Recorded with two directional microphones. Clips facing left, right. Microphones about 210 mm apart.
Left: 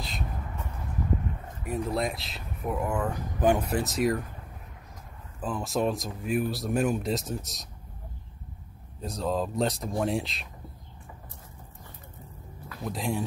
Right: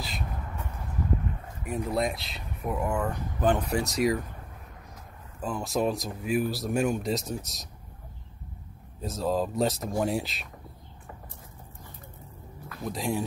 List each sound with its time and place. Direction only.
0.0 s a sound: 5° right (ahead or behind)
1.6 s speech: centre (ahead or behind)
3.6 s speech: centre (ahead or behind)
5.4 s speech: centre (ahead or behind)
9.0 s speech: 5° right (ahead or behind)
12.9 s speech: centre (ahead or behind)